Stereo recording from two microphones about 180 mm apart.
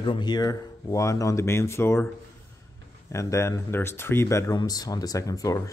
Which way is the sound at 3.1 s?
15° left (ahead or behind).